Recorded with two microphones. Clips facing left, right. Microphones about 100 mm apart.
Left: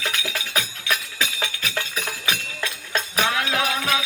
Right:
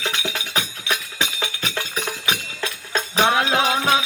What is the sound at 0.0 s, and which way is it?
Music, 25° right (ahead or behind).